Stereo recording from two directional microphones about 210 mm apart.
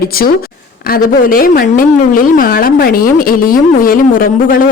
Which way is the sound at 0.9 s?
45° left (ahead or behind).